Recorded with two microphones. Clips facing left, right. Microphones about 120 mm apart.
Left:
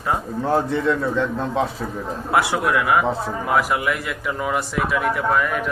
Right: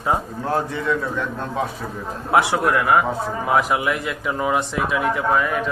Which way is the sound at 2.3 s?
20° right (ahead or behind).